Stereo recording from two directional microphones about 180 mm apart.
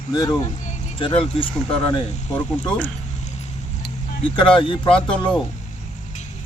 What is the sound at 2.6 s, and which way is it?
Speech, 5° left (ahead or behind).